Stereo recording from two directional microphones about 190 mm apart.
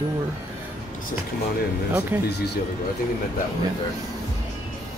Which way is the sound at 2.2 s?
60° left (ahead or behind).